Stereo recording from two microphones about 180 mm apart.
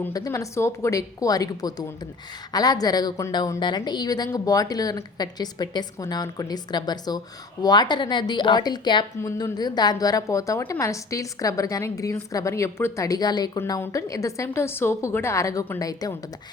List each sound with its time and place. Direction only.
0.0 s a woman's voice: 20° left (ahead or behind)